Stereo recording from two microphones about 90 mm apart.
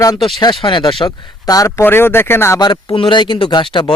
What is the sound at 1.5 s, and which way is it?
Speech, 40° left (ahead or behind).